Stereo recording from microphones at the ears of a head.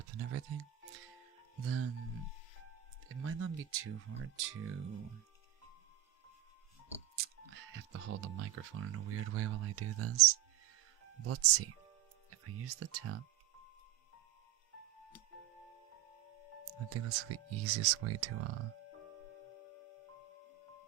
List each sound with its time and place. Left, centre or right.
0.0 s music: right
1.5 s speech: right
3.1 s speech: right
7.2 s speech: right
15.9 s music: left
16.9 s speech: right
18.7 s music: left